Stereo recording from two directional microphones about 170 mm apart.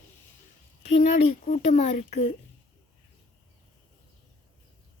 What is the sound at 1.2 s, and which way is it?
Speech, 45° left (ahead or behind).